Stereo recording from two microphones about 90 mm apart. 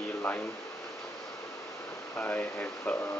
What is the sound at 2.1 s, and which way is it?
Speech, 20° left (ahead or behind).